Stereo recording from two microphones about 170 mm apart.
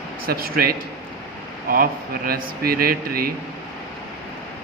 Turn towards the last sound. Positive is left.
turn(degrees=-60)  # may be behind; listen again after turning